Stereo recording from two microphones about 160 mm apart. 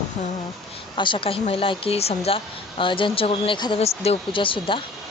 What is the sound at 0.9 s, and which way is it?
A woman's voice, 30° left (ahead or behind).